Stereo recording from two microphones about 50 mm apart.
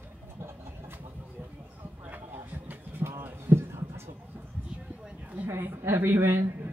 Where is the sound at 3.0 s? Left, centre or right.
Right.